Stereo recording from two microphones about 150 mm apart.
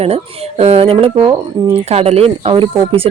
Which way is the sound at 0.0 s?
40° right (ahead or behind).